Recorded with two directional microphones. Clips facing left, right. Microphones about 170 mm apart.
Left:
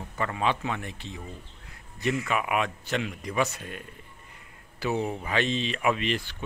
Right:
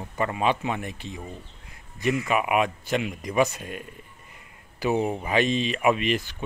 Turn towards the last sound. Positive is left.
turn(degrees=-15)  # may be behind; listen again after turning